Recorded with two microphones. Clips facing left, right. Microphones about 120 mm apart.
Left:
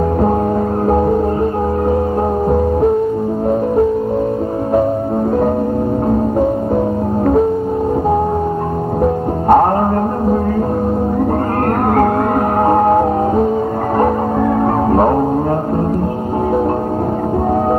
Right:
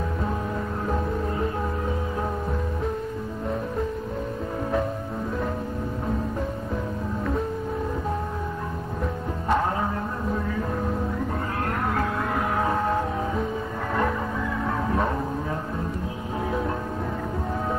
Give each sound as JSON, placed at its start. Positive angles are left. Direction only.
{"t": 9.0, "sound": "music", "side_deg": 55}
{"t": 12.6, "sound": "music", "side_deg": 50}